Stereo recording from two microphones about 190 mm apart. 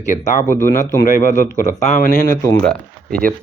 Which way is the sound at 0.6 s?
45° left (ahead or behind).